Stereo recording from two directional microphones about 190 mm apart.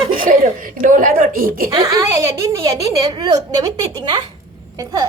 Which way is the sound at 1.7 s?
20° right (ahead or behind).